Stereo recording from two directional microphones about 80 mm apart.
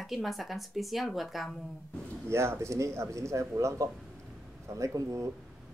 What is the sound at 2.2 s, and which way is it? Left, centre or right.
Speech, right.